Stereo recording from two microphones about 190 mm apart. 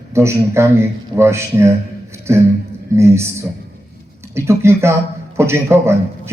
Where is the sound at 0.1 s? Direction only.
15° right (ahead or behind).